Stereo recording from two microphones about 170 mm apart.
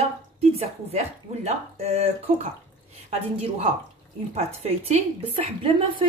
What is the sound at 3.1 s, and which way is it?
A woman's voice, 40° right (ahead or behind).